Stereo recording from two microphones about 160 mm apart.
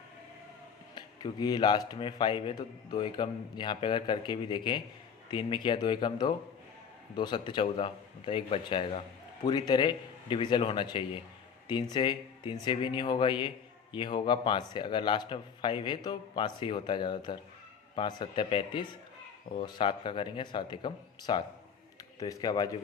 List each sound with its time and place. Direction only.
0.9 s a man's voice: 25° left (ahead or behind)